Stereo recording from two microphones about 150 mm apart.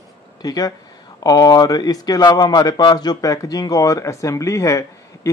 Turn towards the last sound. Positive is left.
turn(degrees=20)  # may be behind; listen again after turning